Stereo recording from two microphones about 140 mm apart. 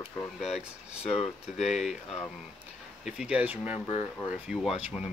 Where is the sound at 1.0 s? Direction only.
45° left (ahead or behind).